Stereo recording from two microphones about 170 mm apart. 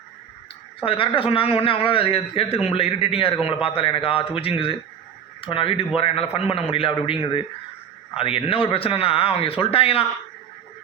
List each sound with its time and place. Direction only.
0.8 s speech: 35° left (ahead or behind)